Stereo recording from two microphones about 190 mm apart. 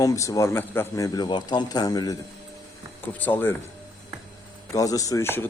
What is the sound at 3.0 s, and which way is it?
Speech, 10° left (ahead or behind).